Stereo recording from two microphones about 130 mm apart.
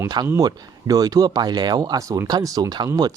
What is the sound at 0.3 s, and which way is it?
Speech, 25° right (ahead or behind).